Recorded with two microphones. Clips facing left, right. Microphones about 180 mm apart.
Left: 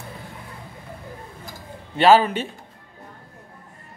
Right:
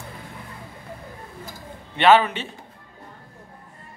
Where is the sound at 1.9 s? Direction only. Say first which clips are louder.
Left 1 dB; 35° left (ahead or behind).